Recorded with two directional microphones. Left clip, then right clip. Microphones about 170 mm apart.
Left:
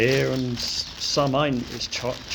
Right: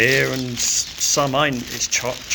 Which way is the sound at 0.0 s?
5° left (ahead or behind).